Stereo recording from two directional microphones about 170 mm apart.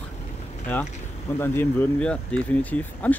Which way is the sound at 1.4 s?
15° left (ahead or behind).